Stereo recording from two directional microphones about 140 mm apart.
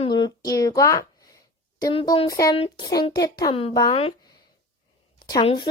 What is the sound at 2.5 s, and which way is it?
Speech, 40° left (ahead or behind).